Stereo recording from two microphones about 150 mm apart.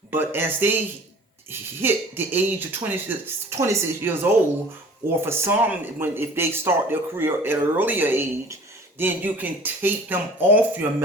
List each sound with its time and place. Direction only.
0.1 s speech: 15° right (ahead or behind)
1.8 s speech: 15° right (ahead or behind)